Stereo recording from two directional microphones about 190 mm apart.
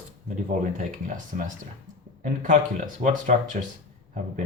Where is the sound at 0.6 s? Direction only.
40° right (ahead or behind).